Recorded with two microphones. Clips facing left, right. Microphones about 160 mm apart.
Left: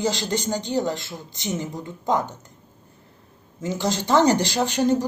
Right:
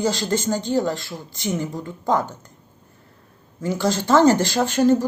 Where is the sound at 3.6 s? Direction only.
20° left (ahead or behind).